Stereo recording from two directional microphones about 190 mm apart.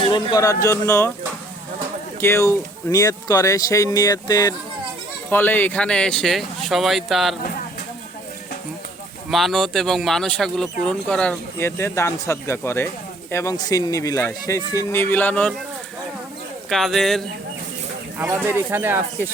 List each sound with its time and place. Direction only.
0.1 s speech: 20° left (ahead or behind)
2.2 s speech: 15° left (ahead or behind)
9.3 s speech: centre (ahead or behind)
16.6 s speech: centre (ahead or behind)
18.2 s speech: 10° right (ahead or behind)